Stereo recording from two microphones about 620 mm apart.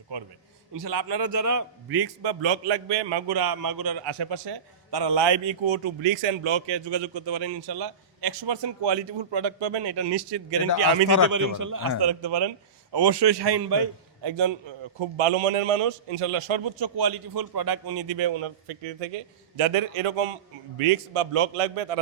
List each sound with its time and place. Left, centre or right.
0.1 s a man's voice: right
19.5 s a man's voice: right